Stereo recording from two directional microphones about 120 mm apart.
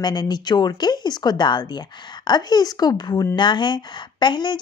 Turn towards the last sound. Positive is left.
turn(degrees=40)  # may be behind; listen again after turning